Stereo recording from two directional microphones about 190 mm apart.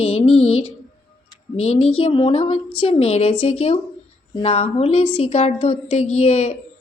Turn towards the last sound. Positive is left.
turn(degrees=35)  # may be behind; listen again after turning